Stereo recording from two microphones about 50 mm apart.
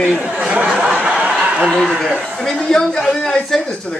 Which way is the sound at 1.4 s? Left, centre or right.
Right.